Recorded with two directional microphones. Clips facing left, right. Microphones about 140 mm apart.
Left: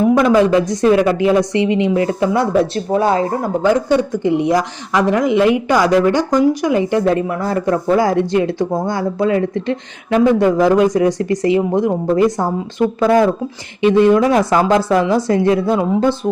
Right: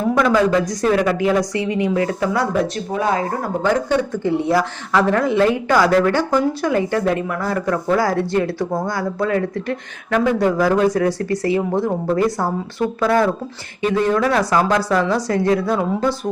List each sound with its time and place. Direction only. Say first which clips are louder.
0.1 s speech: even; 20° left (ahead or behind)
3.6 s speech: left 4 dB; 10° left (ahead or behind)
7.0 s speech: left 4 dB; 30° left (ahead or behind)